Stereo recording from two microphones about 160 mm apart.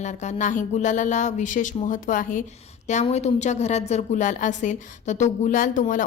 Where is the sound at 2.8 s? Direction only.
45° left (ahead or behind).